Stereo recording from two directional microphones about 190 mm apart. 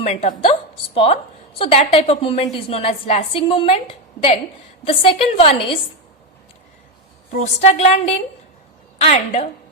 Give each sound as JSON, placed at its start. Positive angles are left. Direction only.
{"t": 0.0, "sound": "a woman's voice", "side_deg": 35}
{"t": 7.4, "sound": "a woman's voice", "side_deg": 35}